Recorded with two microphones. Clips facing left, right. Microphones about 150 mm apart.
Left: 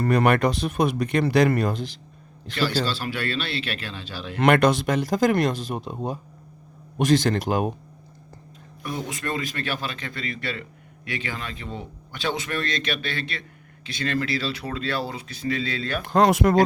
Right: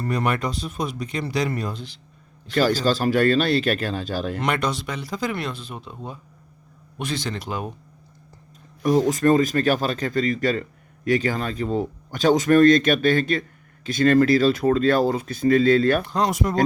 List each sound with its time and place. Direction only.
0.0 s speech: 65° left (ahead or behind)
2.6 s speech: 45° right (ahead or behind)
4.4 s speech: 60° left (ahead or behind)
9.0 s a man's voice: 40° right (ahead or behind)
16.0 s speech: 60° left (ahead or behind)